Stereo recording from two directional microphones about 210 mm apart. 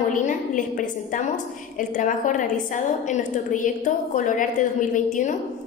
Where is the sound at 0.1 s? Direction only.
40° left (ahead or behind).